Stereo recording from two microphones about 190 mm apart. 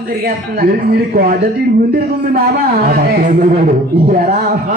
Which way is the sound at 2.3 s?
55° right (ahead or behind).